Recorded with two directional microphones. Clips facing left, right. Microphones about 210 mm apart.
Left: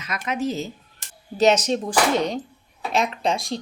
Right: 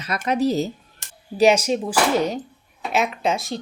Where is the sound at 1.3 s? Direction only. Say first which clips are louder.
Right 2 dB; 10° right (ahead or behind).